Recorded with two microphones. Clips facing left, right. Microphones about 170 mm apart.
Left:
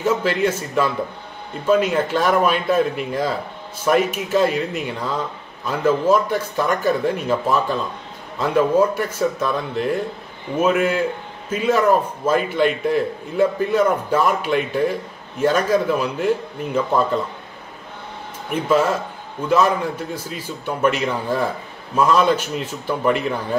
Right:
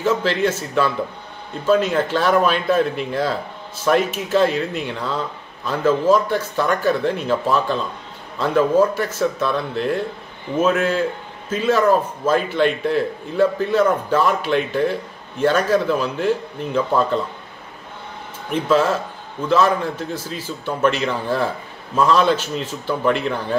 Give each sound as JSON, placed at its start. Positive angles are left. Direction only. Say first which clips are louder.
{"t": 0.0, "sound": "a man's voice", "louder": "even", "side_deg": 10}
{"t": 18.5, "sound": "a man's voice", "louder": "right 1 dB", "side_deg": 10}